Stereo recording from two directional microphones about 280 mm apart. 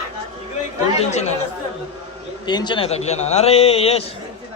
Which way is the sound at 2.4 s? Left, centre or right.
Centre.